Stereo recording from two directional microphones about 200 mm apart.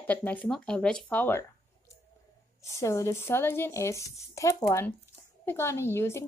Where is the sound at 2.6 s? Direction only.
15° left (ahead or behind).